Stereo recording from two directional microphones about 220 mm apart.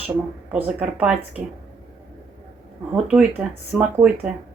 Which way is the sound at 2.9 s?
5° right (ahead or behind).